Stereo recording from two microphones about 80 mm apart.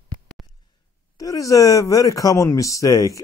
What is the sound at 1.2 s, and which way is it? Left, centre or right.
Speech, left.